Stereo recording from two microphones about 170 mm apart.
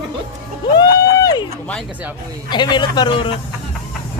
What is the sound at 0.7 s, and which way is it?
Speech, 20° left (ahead or behind).